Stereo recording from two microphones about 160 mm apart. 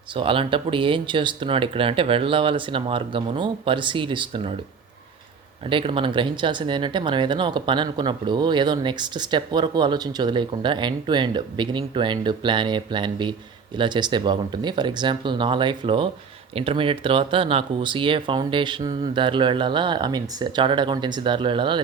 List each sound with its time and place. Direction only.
0.1 s speech: 35° right (ahead or behind)
5.6 s speech: 35° right (ahead or behind)